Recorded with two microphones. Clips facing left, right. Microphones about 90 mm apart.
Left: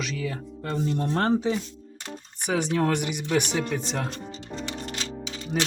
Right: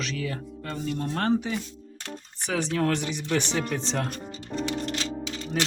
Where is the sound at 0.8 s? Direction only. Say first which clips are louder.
Left 1 dB; 30° left (ahead or behind).